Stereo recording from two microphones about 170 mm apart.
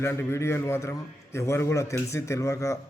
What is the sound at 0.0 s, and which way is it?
A man's voice, 15° left (ahead or behind).